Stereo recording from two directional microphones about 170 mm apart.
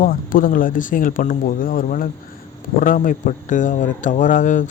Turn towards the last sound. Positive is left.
turn(degrees=50)  # may be behind; listen again after turning